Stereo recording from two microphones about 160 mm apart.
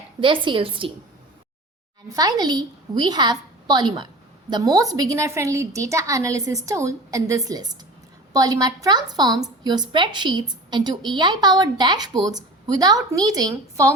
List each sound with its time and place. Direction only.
0.2 s a woman's voice: 30° right (ahead or behind)
2.1 s a woman's voice: 25° right (ahead or behind)